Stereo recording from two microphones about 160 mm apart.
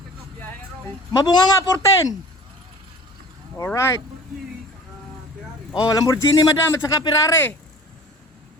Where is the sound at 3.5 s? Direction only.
15° left (ahead or behind).